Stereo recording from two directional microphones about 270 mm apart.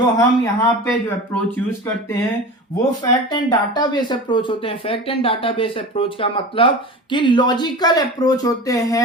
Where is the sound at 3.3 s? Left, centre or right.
Centre.